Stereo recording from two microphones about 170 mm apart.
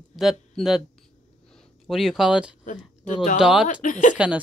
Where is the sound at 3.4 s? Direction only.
5° right (ahead or behind).